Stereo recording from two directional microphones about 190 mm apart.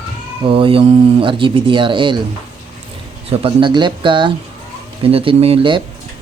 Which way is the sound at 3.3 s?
30° right (ahead or behind).